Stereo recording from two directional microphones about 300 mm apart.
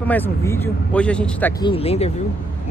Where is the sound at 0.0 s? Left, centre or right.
Centre.